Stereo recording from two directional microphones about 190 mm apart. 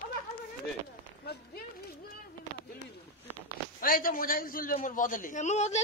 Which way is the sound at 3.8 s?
50° left (ahead or behind).